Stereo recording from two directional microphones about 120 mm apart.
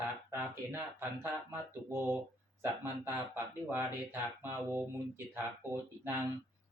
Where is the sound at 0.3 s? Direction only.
20° right (ahead or behind).